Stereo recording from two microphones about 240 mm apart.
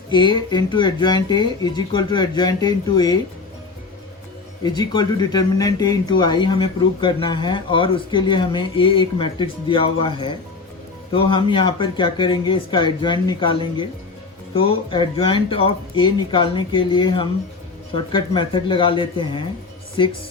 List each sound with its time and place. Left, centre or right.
0.1 s speech: centre
4.6 s speech: centre